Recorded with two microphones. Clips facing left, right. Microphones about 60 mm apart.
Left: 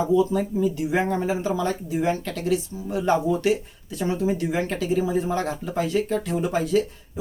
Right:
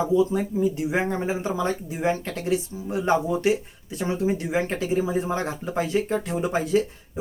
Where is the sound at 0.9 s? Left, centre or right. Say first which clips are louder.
Left 2 dB; right.